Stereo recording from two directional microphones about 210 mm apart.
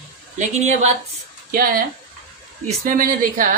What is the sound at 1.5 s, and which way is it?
Speech, 45° right (ahead or behind).